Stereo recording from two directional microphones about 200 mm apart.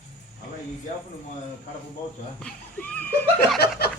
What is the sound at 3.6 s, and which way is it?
Snicker, 50° left (ahead or behind).